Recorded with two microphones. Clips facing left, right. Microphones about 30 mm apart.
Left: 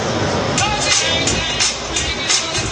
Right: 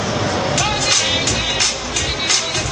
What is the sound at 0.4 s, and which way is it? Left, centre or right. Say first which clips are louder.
Music: even; centre.